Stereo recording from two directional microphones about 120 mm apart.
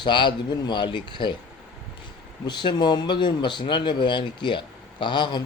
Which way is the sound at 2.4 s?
40° left (ahead or behind).